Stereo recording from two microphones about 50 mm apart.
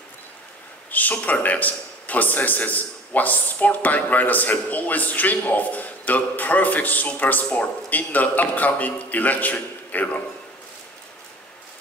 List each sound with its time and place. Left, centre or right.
0.8 s a man's voice: left